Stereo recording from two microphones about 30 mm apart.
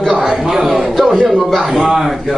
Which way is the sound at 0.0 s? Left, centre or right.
Centre.